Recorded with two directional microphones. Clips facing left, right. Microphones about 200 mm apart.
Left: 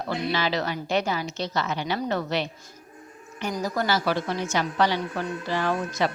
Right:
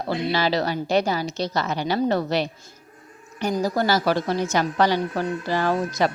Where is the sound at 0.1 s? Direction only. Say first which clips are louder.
Right 4 dB; 35° right (ahead or behind).